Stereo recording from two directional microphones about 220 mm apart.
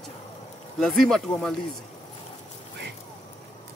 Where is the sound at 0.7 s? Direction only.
Centre (ahead or behind).